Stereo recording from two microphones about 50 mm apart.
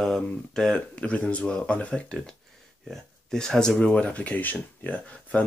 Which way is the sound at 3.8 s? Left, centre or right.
Left.